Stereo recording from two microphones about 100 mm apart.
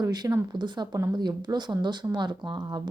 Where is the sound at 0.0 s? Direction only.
40° right (ahead or behind).